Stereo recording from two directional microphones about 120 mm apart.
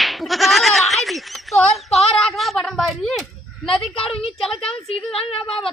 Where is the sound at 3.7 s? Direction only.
50° left (ahead or behind).